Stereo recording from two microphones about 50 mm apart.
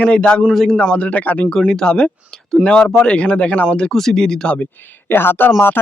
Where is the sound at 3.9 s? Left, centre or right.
Centre.